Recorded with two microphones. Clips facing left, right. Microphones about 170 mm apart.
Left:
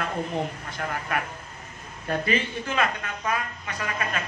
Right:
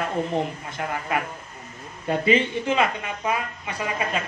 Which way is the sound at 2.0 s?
20° right (ahead or behind).